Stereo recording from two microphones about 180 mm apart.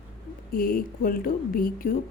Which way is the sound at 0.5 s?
50° left (ahead or behind).